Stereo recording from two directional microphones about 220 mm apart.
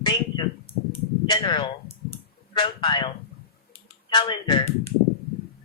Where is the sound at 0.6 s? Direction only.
10° left (ahead or behind).